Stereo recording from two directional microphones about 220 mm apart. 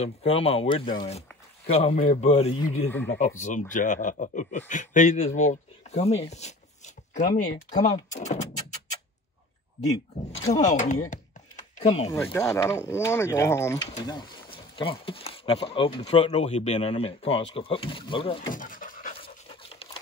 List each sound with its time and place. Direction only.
0.0 s a man's voice: 25° left (ahead or behind)
6.3 s a sound: 30° left (ahead or behind)
7.8 s speech: 30° left (ahead or behind)
10.3 s a man's voice: 30° left (ahead or behind)
12.1 s speech: 10° left (ahead or behind)
18.5 s pant: 40° left (ahead or behind)
19.5 s a sound: 25° left (ahead or behind)